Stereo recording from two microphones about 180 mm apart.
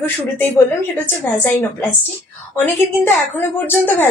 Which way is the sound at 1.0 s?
15° left (ahead or behind).